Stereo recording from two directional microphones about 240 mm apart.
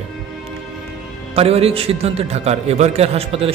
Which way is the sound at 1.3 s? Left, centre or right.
Right.